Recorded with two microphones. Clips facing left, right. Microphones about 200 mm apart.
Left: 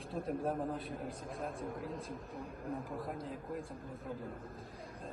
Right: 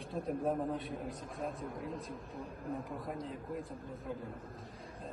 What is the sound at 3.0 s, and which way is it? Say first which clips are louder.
Speech: right 1 dB; centre (ahead or behind).